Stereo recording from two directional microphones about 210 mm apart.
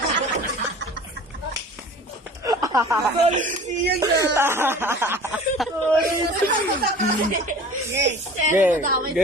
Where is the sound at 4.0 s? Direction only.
15° right (ahead or behind).